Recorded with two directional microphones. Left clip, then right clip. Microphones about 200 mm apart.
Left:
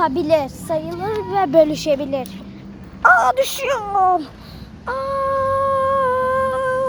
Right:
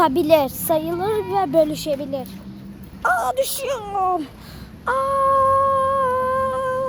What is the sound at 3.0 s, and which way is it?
Speech, 5° left (ahead or behind).